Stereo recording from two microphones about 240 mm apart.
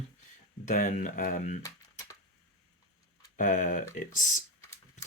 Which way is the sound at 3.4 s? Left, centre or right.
Left.